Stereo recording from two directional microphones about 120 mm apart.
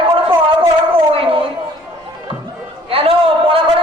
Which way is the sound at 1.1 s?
50° right (ahead or behind).